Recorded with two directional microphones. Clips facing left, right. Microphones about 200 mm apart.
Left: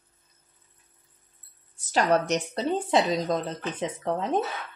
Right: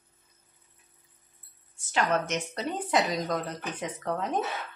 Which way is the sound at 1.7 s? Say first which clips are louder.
Left 4 dB; 35° left (ahead or behind).